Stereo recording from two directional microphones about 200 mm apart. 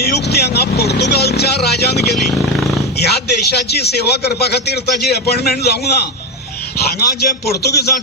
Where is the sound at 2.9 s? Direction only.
55° left (ahead or behind).